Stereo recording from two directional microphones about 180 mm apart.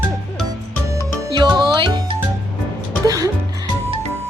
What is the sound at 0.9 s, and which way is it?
Music, 25° right (ahead or behind).